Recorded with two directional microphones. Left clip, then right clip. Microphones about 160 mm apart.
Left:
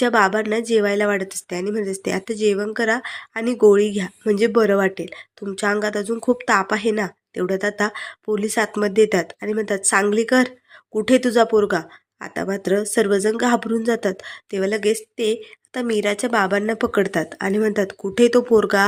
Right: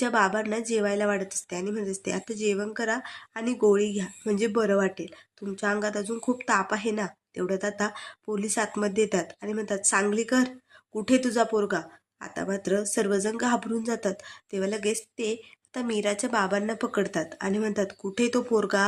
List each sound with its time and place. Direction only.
0.0 s a woman's voice: 25° left (ahead or behind)